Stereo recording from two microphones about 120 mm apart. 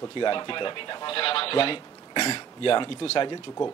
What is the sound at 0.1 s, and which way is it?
Speech, 40° left (ahead or behind).